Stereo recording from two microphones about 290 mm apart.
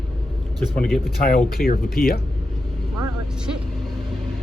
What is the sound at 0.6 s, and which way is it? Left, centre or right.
Speech, centre.